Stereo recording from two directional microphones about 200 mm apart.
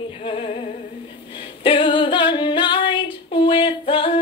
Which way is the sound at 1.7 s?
25° left (ahead or behind).